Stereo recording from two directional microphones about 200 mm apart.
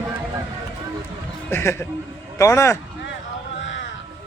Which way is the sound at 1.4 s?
10° left (ahead or behind).